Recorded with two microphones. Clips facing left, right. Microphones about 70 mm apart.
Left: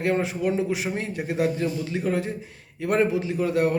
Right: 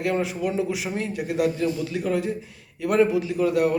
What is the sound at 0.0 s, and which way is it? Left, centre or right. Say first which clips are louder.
A man's voice: left 1 dB; left.